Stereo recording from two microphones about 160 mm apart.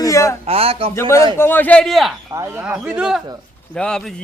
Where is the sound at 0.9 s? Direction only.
20° left (ahead or behind); by 2.1 s centre (ahead or behind).